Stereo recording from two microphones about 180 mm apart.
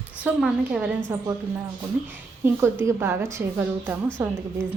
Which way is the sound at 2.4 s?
10° right (ahead or behind).